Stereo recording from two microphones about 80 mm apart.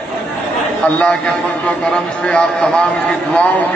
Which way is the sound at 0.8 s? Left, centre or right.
Centre.